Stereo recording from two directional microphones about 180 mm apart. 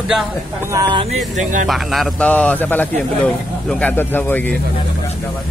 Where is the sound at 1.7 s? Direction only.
Centre (ahead or behind).